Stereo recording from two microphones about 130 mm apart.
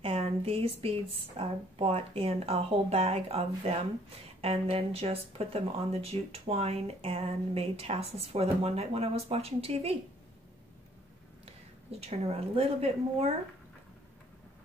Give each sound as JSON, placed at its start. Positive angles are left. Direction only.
{"t": 0.0, "sound": "speech", "side_deg": -50}
{"t": 12.0, "sound": "speech", "side_deg": -50}